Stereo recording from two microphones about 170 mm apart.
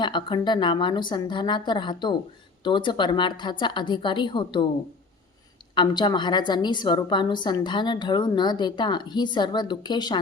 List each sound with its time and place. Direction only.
0.0 s speech: 25° left (ahead or behind)
5.7 s speech: 25° left (ahead or behind)